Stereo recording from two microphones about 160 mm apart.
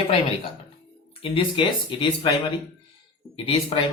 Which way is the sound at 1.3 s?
30° left (ahead or behind).